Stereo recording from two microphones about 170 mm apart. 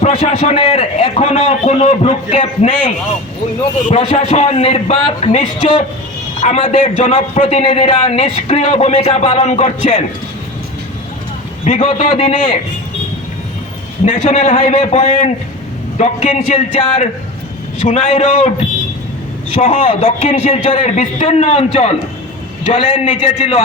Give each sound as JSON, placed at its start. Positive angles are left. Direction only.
{"t": 0.0, "sound": "a man's voice", "side_deg": 40}
{"t": 11.6, "sound": "a man's voice", "side_deg": 35}
{"t": 14.0, "sound": "a man's voice", "side_deg": 40}
{"t": 19.6, "sound": "a man's voice", "side_deg": 30}